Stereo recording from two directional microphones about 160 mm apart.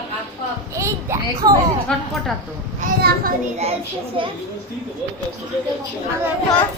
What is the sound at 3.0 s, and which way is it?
Speech, 75° right (ahead or behind).